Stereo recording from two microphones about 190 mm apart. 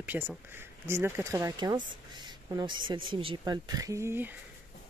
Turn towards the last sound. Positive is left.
turn(degrees=-10)  # may be behind; listen again after turning